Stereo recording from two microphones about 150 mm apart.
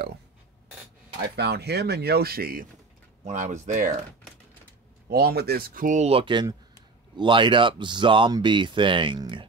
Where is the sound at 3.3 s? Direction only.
55° right (ahead or behind).